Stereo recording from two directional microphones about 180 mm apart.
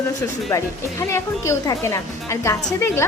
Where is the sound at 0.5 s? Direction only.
15° left (ahead or behind).